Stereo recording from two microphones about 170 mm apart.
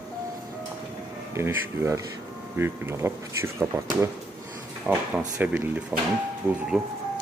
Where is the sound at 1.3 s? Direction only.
15° right (ahead or behind).